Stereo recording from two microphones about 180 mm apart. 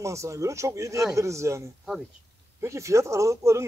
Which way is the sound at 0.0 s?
15° right (ahead or behind).